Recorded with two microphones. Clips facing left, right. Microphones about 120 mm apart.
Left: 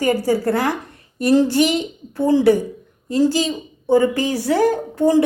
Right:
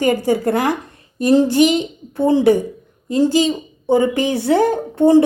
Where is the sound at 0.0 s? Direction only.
20° right (ahead or behind).